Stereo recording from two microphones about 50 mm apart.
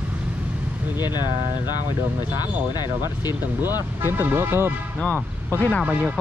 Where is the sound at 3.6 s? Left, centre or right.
Right.